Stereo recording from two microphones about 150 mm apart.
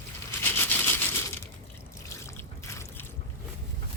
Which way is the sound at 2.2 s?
20° left (ahead or behind).